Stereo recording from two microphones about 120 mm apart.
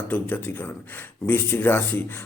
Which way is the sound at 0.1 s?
15° left (ahead or behind).